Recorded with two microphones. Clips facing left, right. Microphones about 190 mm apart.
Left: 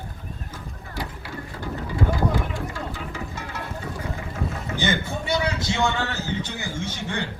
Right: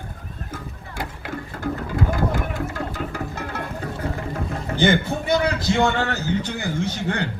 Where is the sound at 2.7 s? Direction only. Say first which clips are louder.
Right 4 dB; 50° right (ahead or behind).